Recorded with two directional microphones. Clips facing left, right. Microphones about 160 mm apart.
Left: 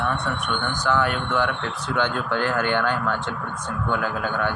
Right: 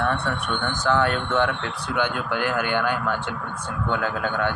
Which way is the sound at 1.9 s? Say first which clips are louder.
Left 1 dB; 10° right (ahead or behind).